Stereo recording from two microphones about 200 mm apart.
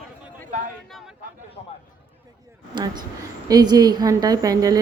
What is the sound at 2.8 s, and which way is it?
A woman's voice, 20° right (ahead or behind).